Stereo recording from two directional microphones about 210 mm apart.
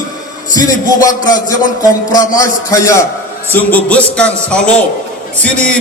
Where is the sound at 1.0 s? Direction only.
15° left (ahead or behind).